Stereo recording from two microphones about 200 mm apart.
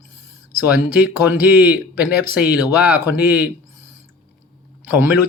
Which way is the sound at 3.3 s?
10° right (ahead or behind).